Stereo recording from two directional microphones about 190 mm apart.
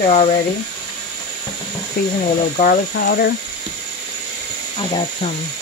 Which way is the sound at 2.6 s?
50° left (ahead or behind).